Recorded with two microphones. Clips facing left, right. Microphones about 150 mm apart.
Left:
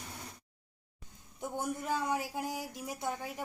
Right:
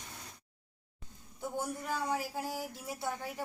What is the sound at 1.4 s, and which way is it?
Speech, 20° left (ahead or behind).